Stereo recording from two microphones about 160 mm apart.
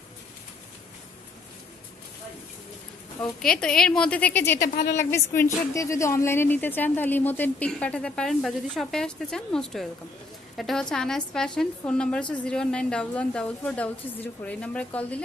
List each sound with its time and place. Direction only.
3.2 s a woman's voice: 5° left (ahead or behind)
4.6 s speech: 60° left (ahead or behind)
4.9 s a woman's voice: 15° left (ahead or behind)